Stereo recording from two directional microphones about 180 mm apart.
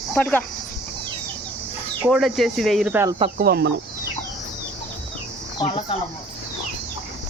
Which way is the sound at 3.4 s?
60° right (ahead or behind).